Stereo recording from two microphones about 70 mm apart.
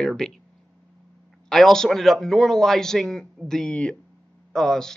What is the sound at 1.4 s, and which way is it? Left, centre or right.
Speech, centre.